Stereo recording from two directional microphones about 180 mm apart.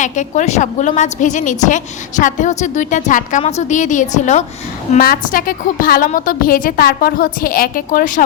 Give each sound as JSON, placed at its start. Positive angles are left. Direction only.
{"t": 0.0, "sound": "a woman's voice", "side_deg": 45}
{"t": 4.9, "sound": "a woman's voice", "side_deg": 55}